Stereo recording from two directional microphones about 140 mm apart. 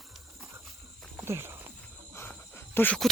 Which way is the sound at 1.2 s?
15° right (ahead or behind).